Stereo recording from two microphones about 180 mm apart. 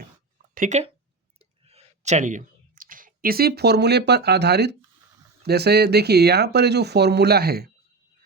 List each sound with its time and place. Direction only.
0.5 s speech: 45° right (ahead or behind); by 7.7 s 60° right (ahead or behind)